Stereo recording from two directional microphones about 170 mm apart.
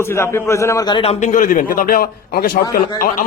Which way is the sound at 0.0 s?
15° left (ahead or behind).